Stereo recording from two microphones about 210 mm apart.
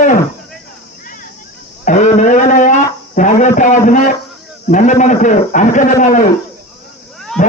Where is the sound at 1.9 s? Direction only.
35° left (ahead or behind).